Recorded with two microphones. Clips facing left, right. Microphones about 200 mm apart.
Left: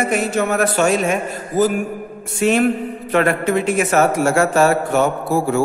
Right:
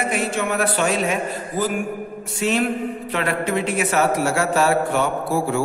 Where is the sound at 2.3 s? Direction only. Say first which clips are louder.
Left 5 dB; 50° left (ahead or behind).